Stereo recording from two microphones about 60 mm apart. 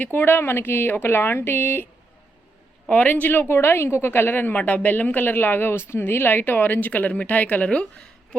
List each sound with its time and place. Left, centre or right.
0.0 s speech: left
2.9 s speech: left